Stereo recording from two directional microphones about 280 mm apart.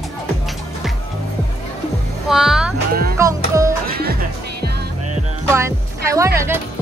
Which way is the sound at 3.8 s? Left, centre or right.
Right.